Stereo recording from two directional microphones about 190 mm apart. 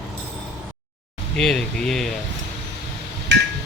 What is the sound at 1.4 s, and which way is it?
Speech, centre (ahead or behind).